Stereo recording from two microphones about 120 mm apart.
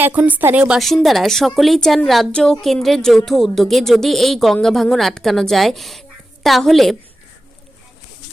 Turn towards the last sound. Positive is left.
turn(degrees=0)  # may be behind; listen again after turning